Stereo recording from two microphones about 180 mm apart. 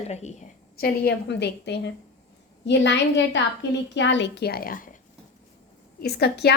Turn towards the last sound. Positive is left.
turn(degrees=65)  # may be behind; listen again after turning